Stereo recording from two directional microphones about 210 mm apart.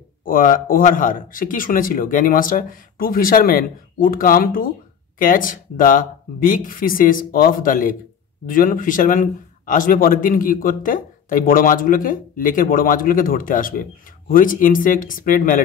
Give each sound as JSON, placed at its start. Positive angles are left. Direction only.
{"t": 0.2, "sound": "speech", "side_deg": 40}